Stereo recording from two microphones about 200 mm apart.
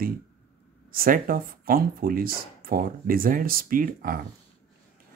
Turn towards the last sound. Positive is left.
turn(degrees=-45)  # may be behind; listen again after turning